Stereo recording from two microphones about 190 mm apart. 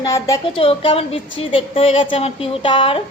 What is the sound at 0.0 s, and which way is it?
Speech, 15° left (ahead or behind).